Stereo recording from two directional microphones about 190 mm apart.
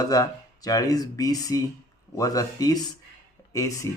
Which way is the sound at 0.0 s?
20° left (ahead or behind).